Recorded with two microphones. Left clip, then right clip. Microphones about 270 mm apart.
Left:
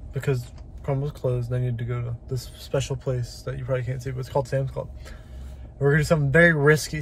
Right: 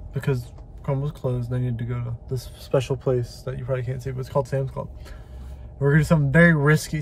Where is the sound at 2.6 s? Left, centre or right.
Right.